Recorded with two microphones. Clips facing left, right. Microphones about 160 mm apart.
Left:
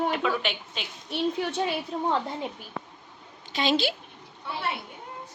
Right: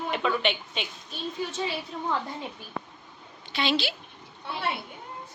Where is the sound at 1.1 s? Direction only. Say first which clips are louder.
Left 7 dB; 65° left (ahead or behind).